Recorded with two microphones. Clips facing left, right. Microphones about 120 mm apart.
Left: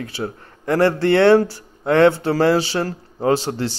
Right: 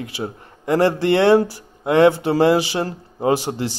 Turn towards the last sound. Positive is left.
turn(degrees=-15)  # may be behind; listen again after turning